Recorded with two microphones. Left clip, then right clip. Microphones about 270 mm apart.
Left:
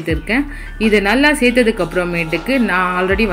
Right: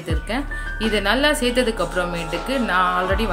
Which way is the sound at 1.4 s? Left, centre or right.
Right.